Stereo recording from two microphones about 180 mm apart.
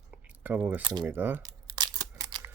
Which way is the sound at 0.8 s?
25° right (ahead or behind).